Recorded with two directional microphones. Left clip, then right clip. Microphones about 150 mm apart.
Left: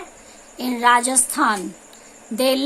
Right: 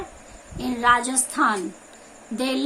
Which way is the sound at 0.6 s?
65° left (ahead or behind).